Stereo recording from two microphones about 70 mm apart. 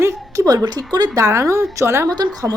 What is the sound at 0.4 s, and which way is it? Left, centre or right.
Speech, right.